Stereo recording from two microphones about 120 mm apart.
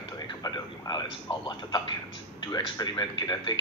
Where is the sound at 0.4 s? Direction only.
30° left (ahead or behind).